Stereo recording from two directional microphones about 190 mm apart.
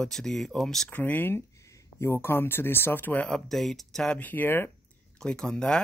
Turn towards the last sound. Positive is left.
turn(degrees=5)  # may be behind; listen again after turning